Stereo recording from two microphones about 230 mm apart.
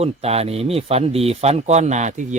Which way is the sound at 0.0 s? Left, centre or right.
Right.